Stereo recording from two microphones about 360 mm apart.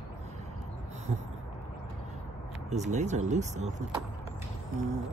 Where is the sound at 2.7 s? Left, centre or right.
Centre.